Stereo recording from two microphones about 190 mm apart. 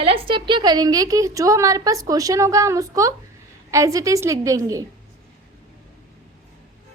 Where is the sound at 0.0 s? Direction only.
30° right (ahead or behind).